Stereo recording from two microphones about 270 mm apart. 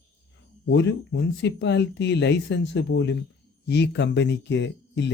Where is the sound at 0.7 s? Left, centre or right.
Left.